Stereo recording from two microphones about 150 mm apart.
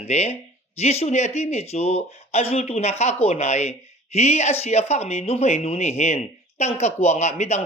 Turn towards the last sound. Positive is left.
turn(degrees=50)  # may be behind; listen again after turning